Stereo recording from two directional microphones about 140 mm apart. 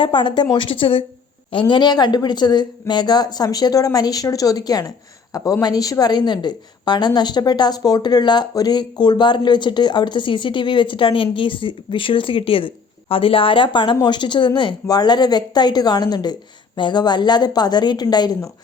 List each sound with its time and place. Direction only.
0.0 s a woman's voice: 35° left (ahead or behind)